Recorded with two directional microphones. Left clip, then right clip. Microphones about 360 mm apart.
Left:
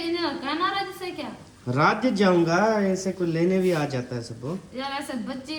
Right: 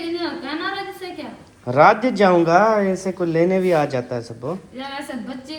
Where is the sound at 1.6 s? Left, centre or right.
Centre.